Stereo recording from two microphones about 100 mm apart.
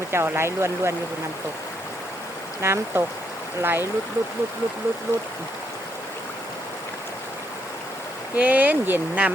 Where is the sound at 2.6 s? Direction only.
25° right (ahead or behind).